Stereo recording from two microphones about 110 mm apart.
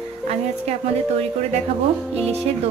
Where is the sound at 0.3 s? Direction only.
80° right.